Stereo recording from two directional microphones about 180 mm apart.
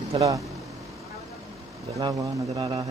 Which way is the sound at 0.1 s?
25° right (ahead or behind).